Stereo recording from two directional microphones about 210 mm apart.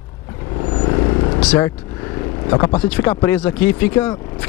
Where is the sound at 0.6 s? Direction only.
20° left (ahead or behind).